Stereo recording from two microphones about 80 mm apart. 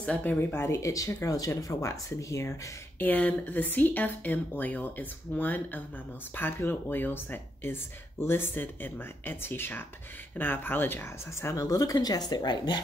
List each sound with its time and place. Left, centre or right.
0.0 s speech: centre; by 2.5 s left
3.0 s speech: left
11.5 s speech: left